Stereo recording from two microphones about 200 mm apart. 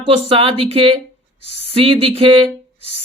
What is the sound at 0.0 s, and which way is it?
Speech, 30° right (ahead or behind).